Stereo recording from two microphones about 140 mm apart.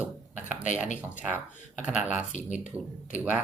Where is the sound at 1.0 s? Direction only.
10° right (ahead or behind).